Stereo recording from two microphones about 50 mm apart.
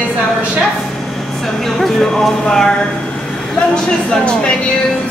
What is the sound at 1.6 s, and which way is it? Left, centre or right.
Speech, centre.